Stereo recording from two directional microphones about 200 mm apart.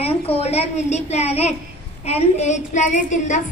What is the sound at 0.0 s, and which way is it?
A woman's voice, 30° left (ahead or behind).